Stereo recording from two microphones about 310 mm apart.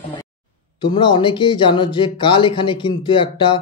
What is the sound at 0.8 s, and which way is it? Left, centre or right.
Speech, centre.